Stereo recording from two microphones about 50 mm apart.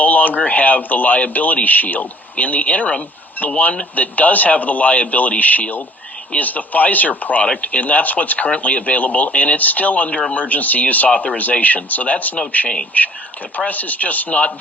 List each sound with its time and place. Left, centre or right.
0.0 s speech: left